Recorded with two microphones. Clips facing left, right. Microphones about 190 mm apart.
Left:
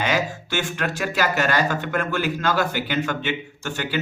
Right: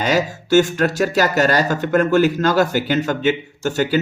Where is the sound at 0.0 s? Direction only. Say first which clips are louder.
Right 5 dB; 40° right (ahead or behind).